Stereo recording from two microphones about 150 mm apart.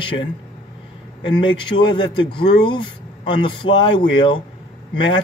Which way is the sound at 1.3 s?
35° left (ahead or behind).